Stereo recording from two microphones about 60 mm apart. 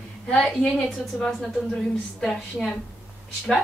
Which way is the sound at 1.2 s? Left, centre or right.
Centre.